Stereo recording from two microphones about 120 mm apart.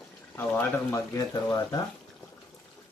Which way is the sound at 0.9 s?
30° left (ahead or behind).